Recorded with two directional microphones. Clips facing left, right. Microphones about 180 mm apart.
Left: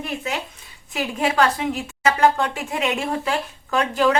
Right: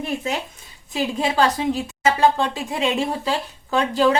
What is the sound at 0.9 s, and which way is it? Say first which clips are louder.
A woman's voice: even; 30° right (ahead or behind).